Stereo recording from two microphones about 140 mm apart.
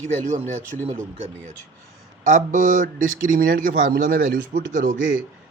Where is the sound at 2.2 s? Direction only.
70° right (ahead or behind).